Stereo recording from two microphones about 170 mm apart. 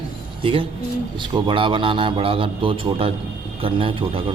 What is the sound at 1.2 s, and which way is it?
A man's voice, 30° right (ahead or behind).